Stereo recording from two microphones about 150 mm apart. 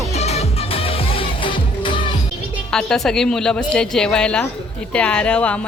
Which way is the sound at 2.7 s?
5° left (ahead or behind).